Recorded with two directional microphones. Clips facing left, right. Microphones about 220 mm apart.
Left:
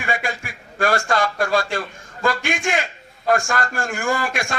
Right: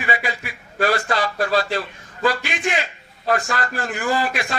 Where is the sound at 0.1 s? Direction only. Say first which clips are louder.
Even; 45° left (ahead or behind).